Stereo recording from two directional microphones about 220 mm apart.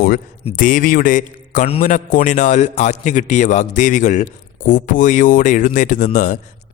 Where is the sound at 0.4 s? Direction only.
35° left (ahead or behind).